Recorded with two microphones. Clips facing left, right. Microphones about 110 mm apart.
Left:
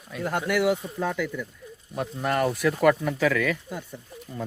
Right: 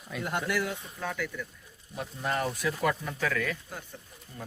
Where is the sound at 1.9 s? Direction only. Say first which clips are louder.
Left 6 dB; 60° left (ahead or behind); by 3.5 s 90° left.